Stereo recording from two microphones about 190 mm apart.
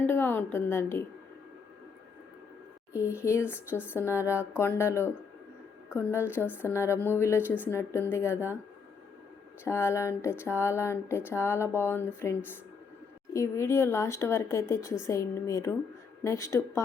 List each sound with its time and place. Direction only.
0.0 s a woman's voice: 10° left (ahead or behind)
2.9 s speech: 15° left (ahead or behind)
9.6 s speech: 15° left (ahead or behind)